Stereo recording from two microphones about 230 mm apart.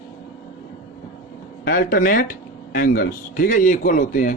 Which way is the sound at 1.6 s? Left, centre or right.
Left.